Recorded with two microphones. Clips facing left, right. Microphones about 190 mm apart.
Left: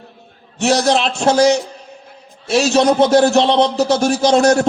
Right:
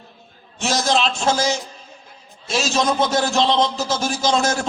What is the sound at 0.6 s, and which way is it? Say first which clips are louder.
A man's voice: left 5 dB; 65° left (ahead or behind).